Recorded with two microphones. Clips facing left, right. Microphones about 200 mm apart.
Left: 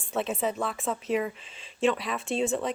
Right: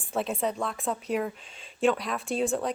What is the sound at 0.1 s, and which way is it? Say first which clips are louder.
A woman's voice: even; centre (ahead or behind).